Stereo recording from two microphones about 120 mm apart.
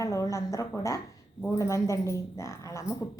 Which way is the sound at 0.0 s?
25° left (ahead or behind).